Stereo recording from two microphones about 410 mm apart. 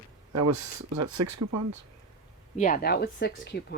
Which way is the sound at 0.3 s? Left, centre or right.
Right.